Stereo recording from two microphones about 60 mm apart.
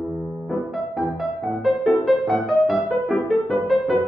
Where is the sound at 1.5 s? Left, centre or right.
Centre.